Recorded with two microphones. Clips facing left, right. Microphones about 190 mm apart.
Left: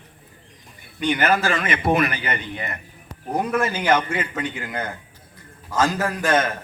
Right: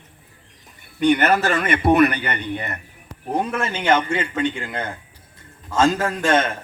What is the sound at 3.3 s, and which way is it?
A man's voice, 25° right (ahead or behind).